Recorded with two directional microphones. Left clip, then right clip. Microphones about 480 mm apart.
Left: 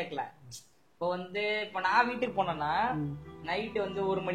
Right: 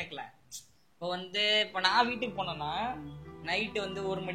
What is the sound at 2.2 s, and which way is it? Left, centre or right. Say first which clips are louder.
Speech: left 4 dB; right.